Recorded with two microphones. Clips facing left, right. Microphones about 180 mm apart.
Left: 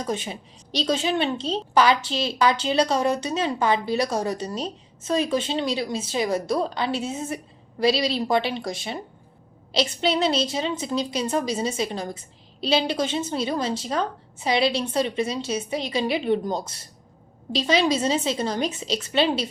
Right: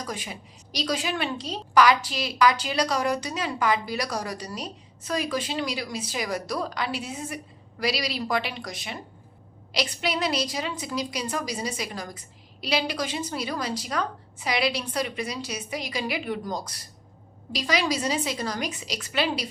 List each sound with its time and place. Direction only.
0.0 s a woman's voice: 25° left (ahead or behind)